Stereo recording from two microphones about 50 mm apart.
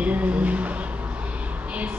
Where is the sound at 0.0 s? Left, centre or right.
Right.